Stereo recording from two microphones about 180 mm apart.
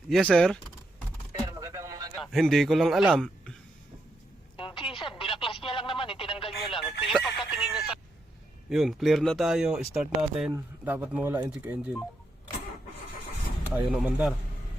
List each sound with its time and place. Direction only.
0.1 s speech: 5° left (ahead or behind)
1.3 s a sound: 20° right (ahead or behind)
2.1 s a man's voice: centre (ahead or behind)
4.5 s telephone: 30° left (ahead or behind)
6.5 s telephone: centre (ahead or behind)
8.7 s speech: centre (ahead or behind)
13.7 s speech: 5° right (ahead or behind)